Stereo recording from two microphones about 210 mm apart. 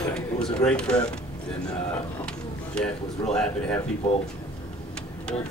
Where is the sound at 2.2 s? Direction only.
5° left (ahead or behind).